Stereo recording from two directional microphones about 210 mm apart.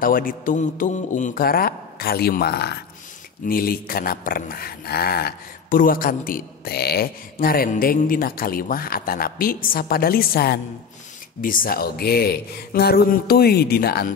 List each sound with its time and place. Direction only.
0.0 s speech: 40° left (ahead or behind)